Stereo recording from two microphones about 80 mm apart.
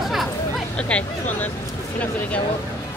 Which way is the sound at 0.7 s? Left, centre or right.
Centre.